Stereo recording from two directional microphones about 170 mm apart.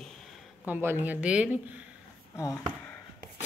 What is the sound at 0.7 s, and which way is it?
Speech, 10° right (ahead or behind).